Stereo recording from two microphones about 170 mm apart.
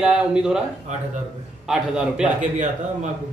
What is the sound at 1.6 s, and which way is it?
Speech, 5° right (ahead or behind).